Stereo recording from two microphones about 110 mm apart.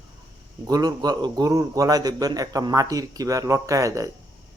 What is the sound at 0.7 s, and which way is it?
A man's voice, 40° right (ahead or behind).